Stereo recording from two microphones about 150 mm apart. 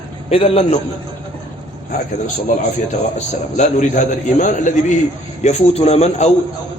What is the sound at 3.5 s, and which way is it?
A man's voice, 55° left (ahead or behind).